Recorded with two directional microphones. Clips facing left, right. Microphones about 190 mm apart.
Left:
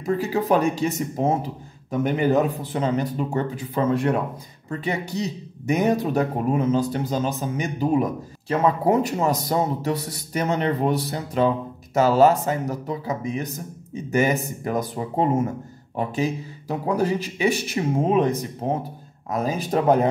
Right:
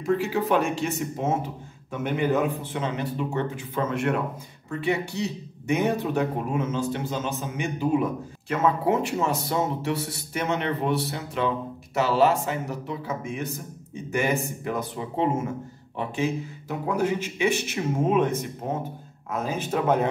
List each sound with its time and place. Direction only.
0.0 s speech: 40° left (ahead or behind)